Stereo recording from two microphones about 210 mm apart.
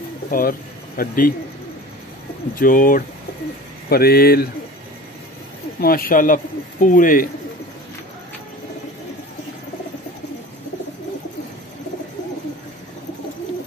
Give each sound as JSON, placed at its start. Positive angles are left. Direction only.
{"t": 0.3, "sound": "speech", "side_deg": 45}
{"t": 2.5, "sound": "a man's voice", "side_deg": 40}
{"t": 5.8, "sound": "a man's voice", "side_deg": 45}